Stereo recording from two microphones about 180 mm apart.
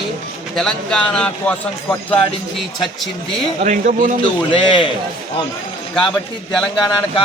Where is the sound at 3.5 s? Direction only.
45° right (ahead or behind).